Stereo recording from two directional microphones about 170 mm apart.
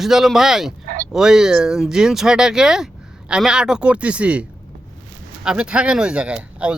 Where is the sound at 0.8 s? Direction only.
60° right (ahead or behind).